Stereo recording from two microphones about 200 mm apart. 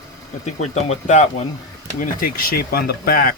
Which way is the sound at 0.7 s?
35° left (ahead or behind).